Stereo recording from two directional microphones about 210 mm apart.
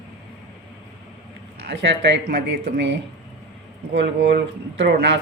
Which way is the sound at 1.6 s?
55° right (ahead or behind).